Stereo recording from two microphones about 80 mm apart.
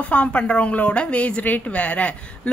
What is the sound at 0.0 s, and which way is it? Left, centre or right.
A woman's voice, centre.